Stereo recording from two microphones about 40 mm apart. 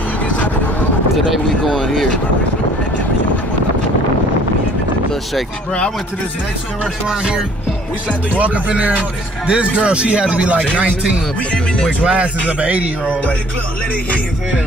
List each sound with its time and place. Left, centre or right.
1.8 s speech: centre
7.1 s speech: right
8.4 s music: right
9.5 s speech: right
12.0 s music: right